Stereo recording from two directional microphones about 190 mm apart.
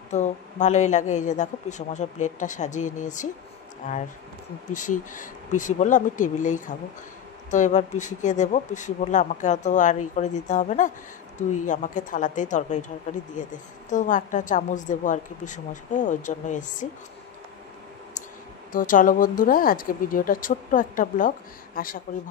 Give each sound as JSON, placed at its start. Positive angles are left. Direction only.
{"t": 0.1, "sound": "a woman's voice", "side_deg": 40}
{"t": 18.7, "sound": "speech", "side_deg": 45}